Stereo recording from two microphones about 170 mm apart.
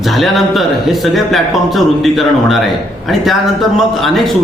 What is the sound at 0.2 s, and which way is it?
A man's voice, centre (ahead or behind).